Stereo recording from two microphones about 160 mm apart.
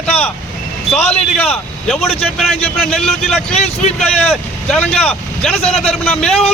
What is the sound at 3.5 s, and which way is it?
Speech, 40° left (ahead or behind).